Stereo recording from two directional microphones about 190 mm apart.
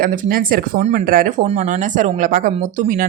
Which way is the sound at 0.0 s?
50° right (ahead or behind).